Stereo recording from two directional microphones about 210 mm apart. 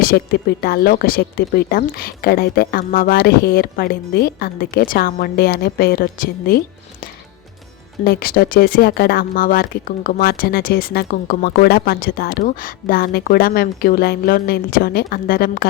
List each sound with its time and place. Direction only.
0.0 s speech: 50° left (ahead or behind)
8.0 s speech: 45° left (ahead or behind)